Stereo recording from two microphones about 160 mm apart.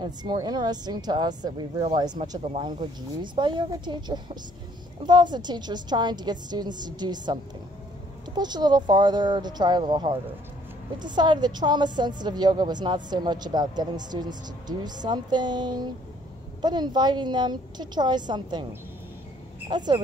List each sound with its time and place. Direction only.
0.0 s a woman's voice: 25° right (ahead or behind)
8.4 s a woman's voice: 25° right (ahead or behind)
19.7 s a woman's voice: 25° right (ahead or behind)